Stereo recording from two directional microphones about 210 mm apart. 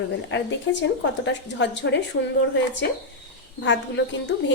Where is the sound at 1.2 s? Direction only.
60° left (ahead or behind).